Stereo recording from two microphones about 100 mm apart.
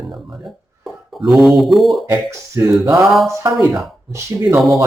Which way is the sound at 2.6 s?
30° right (ahead or behind).